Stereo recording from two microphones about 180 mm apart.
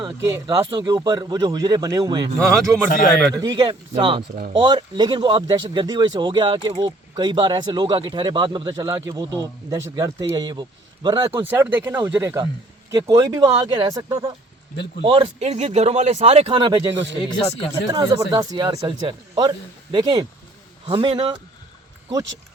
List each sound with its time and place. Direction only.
0.4 s speech: 25° right (ahead or behind)
2.4 s speech: 5° left (ahead or behind)
3.3 s speech: 20° right (ahead or behind)
15.0 s speech: 30° right (ahead or behind)
16.9 s speech: 80° right
17.2 s speech: 30° left (ahead or behind)
17.8 s speech: 25° right (ahead or behind)